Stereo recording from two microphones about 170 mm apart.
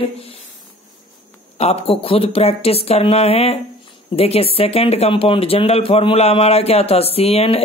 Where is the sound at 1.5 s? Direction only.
35° left (ahead or behind).